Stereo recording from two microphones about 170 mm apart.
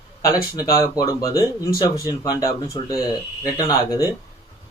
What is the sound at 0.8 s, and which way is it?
Speech, 20° left (ahead or behind).